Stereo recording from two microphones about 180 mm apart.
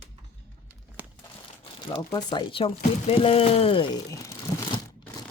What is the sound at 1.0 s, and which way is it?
Crumpling, 10° right (ahead or behind).